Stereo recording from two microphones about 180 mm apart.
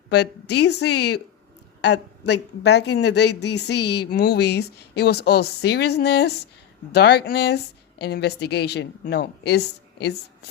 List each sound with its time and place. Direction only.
0.1 s a woman's voice: 70° left (ahead or behind)